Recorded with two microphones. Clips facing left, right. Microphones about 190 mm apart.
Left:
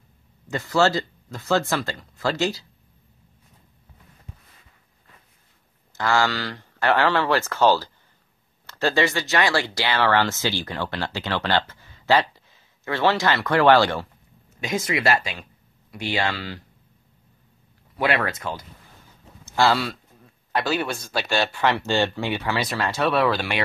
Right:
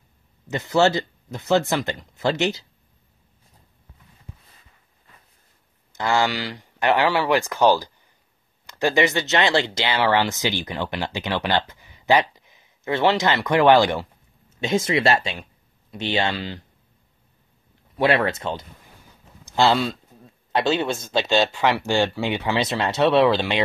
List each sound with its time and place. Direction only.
0.5 s speech: 20° right (ahead or behind)
5.9 s speech: 20° right (ahead or behind)
17.9 s speech: 25° right (ahead or behind)